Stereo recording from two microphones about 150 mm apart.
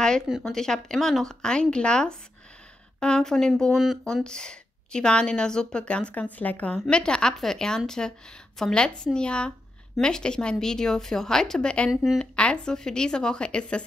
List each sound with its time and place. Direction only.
0.0 s speech: 5° left (ahead or behind)